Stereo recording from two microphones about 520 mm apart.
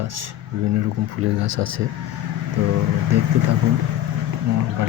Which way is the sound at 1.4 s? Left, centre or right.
Right.